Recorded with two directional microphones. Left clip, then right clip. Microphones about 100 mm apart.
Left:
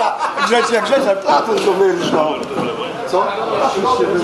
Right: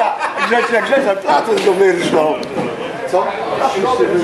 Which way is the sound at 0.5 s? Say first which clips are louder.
Right 1 dB; 40° left (ahead or behind).